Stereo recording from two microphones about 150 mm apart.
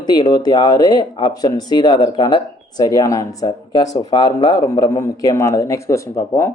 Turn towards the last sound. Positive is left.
turn(degrees=20)  # may be behind; listen again after turning